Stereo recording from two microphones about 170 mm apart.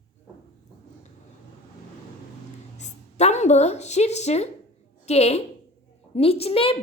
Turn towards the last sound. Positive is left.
turn(degrees=35)  # may be behind; listen again after turning